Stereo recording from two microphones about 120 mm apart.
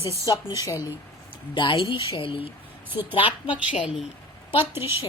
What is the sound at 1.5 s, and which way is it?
A woman's voice, 45° left (ahead or behind).